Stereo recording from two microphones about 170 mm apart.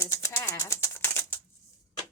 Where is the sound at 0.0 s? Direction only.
15° left (ahead or behind).